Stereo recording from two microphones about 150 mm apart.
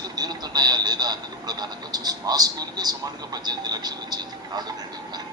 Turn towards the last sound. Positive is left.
turn(degrees=-25)  # may be behind; listen again after turning